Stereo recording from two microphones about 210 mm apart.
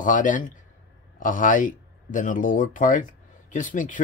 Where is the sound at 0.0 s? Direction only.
40° left (ahead or behind).